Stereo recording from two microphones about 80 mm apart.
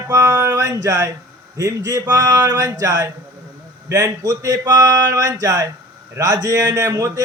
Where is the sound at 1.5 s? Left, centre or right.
Right.